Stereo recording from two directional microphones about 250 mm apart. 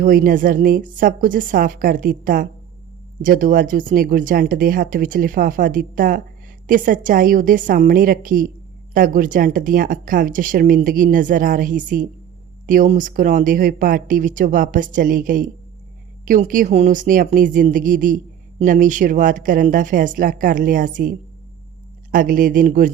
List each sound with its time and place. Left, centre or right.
0.0 s speech: right
22.1 s speech: right